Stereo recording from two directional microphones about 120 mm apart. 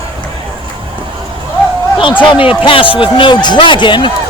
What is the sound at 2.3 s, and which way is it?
A man's voice, 45° left (ahead or behind).